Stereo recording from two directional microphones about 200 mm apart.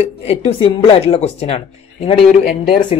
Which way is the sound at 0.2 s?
30° left (ahead or behind).